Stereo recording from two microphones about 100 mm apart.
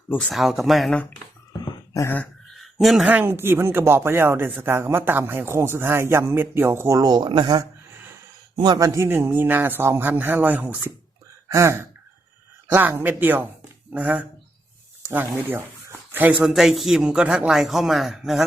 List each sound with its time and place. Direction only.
0.3 s speech: centre (ahead or behind)
1.9 s a sound: 30° left (ahead or behind)
2.6 s a sound: centre (ahead or behind)
3.1 s speech: 20° right (ahead or behind)
11.4 s speech: 30° right (ahead or behind)
16.5 s speech: 5° right (ahead or behind)